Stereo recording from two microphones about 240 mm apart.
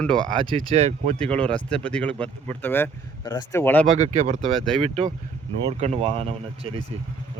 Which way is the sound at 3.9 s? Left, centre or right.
Right.